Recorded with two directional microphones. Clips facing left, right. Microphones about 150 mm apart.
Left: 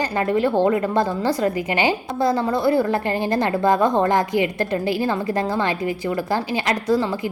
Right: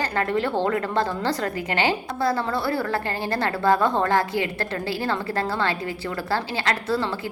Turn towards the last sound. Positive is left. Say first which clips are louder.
# left 5 dB
turn(degrees=15)  # may be behind; listen again after turning